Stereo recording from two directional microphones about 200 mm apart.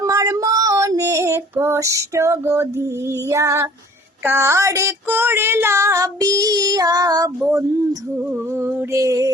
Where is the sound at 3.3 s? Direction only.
15° right (ahead or behind).